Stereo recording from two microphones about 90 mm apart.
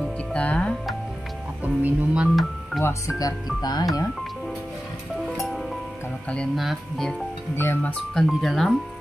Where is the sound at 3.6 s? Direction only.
50° left (ahead or behind).